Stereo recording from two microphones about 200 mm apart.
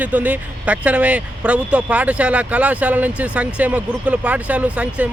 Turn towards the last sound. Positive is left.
turn(degrees=-5)  # may be behind; listen again after turning